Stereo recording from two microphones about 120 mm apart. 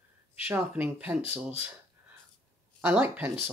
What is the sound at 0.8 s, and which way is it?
Speech, 15° right (ahead or behind).